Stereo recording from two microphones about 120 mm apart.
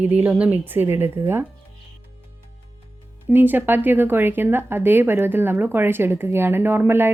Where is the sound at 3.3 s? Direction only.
15° right (ahead or behind).